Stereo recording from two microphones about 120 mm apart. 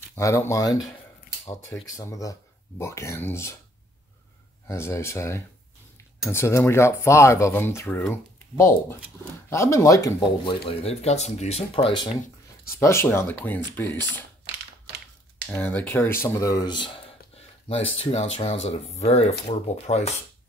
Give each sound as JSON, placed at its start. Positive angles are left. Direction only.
{"t": 0.1, "sound": "speech", "side_deg": 20}
{"t": 4.6, "sound": "speech", "side_deg": 25}
{"t": 10.4, "sound": "speech", "side_deg": 50}
{"t": 12.7, "sound": "speech", "side_deg": 20}
{"t": 15.4, "sound": "speech", "side_deg": 15}
{"t": 17.6, "sound": "speech", "side_deg": 60}